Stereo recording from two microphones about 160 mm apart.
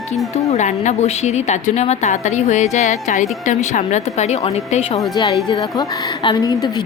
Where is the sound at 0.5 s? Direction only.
45° left (ahead or behind).